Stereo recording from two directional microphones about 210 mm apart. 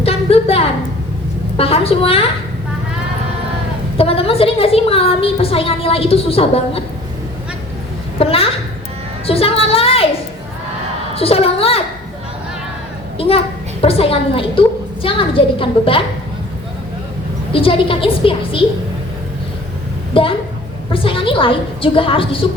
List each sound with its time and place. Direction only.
0.0 s a sound: 30° left (ahead or behind)
1.5 s a woman's voice: 25° left (ahead or behind)
3.9 s a woman's voice: 25° left (ahead or behind)
8.2 s a woman's voice: 25° left (ahead or behind)
9.2 s a sound: 25° left (ahead or behind)
11.1 s a woman's voice: 25° left (ahead or behind)
13.1 s a woman's voice: 25° left (ahead or behind)
17.5 s a woman's voice: 25° left (ahead or behind)
20.1 s a woman's voice: 25° left (ahead or behind)